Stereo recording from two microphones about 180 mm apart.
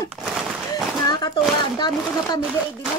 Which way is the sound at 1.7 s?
25° left (ahead or behind).